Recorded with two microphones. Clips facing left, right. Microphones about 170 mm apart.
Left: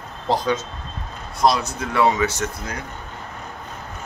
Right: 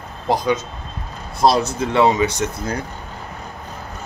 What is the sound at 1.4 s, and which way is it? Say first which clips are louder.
Speech: right 3 dB; 30° right (ahead or behind).